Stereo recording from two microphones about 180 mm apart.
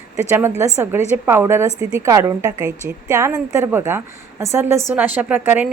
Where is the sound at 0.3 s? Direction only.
15° right (ahead or behind).